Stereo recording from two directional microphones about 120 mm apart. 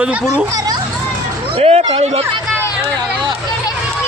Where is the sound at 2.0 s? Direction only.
70° right (ahead or behind).